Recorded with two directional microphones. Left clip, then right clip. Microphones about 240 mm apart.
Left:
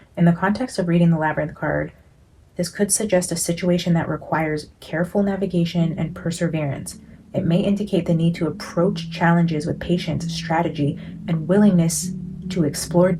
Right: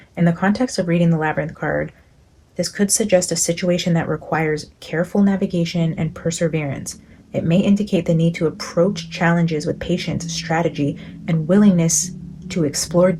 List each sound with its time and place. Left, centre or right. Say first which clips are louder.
0.2 s speech: right 2 dB; right